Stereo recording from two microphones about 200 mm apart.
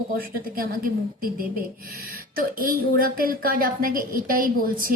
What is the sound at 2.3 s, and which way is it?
A woman's voice, 45° right (ahead or behind).